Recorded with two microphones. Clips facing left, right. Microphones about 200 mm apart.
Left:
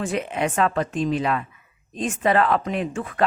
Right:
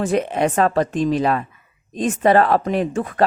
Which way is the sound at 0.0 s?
40° right (ahead or behind).